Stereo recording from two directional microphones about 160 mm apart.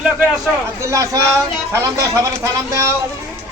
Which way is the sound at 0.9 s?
20° right (ahead or behind).